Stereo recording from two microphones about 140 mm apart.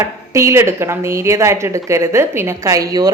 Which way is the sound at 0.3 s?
20° right (ahead or behind).